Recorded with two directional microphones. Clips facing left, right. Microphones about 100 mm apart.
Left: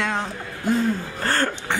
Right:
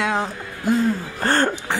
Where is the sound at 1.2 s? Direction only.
25° right (ahead or behind).